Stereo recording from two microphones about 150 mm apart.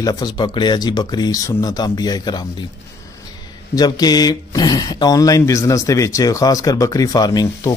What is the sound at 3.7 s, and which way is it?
Speech, 25° left (ahead or behind).